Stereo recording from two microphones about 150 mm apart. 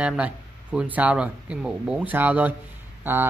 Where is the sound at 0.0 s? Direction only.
10° right (ahead or behind).